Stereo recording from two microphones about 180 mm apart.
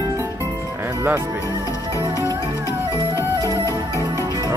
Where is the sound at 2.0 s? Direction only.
20° right (ahead or behind).